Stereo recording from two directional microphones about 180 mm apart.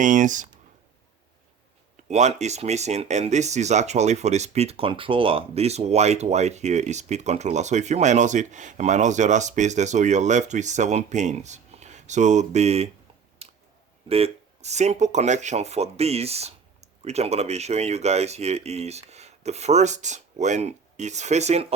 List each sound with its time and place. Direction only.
0.0 s speech: 45° right (ahead or behind)
2.0 s speech: 40° right (ahead or behind)
13.4 s a sound: 35° right (ahead or behind)
14.1 s speech: 35° right (ahead or behind)